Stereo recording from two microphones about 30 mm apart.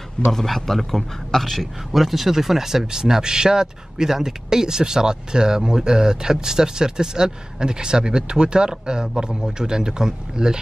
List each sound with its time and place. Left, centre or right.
0.3 s a man's voice: centre; by 10.6 s right